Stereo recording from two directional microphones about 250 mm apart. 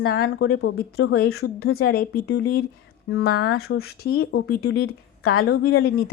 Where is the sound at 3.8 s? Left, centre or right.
Left.